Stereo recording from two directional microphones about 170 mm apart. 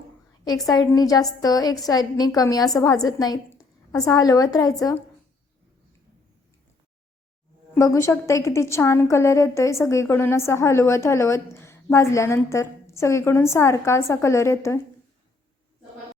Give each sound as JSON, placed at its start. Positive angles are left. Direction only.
{"t": 0.4, "sound": "a woman's voice", "side_deg": 20}
{"t": 7.7, "sound": "a woman's voice", "side_deg": 15}